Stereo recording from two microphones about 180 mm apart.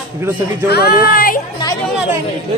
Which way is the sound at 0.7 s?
60° left (ahead or behind).